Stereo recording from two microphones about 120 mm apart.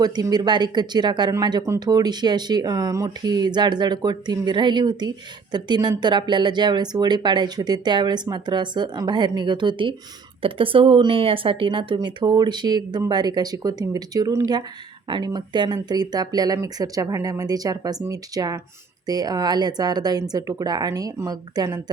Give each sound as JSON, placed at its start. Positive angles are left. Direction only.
{"t": 0.0, "sound": "speech", "side_deg": -35}